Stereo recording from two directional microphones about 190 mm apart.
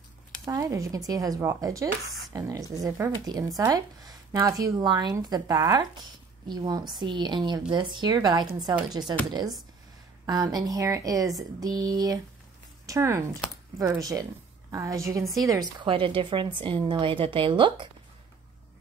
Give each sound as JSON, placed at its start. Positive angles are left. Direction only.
{"t": 0.5, "sound": "speech", "side_deg": -15}